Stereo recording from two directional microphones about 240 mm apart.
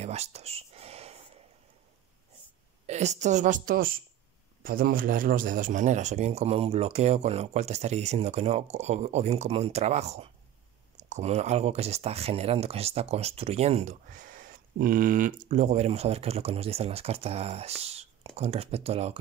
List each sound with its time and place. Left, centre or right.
0.0 s whispering: right
2.9 s a woman's voice: right